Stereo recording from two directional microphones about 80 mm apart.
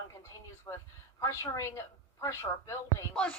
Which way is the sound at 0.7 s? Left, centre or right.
Left.